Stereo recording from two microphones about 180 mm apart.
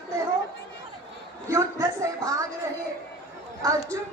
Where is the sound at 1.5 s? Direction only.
15° right (ahead or behind).